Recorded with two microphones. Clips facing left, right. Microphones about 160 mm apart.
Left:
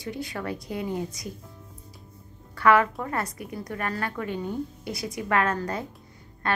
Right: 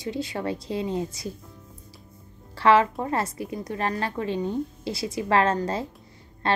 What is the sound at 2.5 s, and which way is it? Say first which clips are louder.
A woman's voice: right 1 dB; 25° right (ahead or behind).